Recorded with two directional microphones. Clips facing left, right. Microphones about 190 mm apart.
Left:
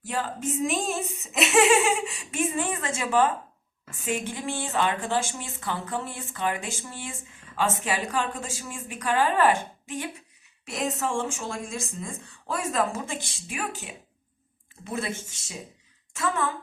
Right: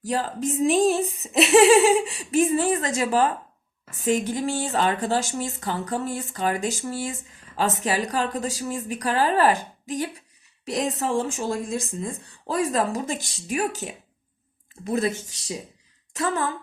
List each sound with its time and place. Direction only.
0.0 s a woman's voice: 35° right (ahead or behind)